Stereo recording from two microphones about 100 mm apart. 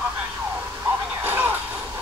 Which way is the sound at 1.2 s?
20° right (ahead or behind).